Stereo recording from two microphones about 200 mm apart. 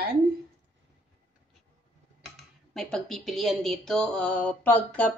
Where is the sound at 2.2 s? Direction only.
Centre (ahead or behind).